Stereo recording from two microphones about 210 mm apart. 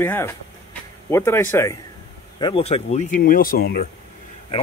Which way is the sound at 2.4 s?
30° left (ahead or behind).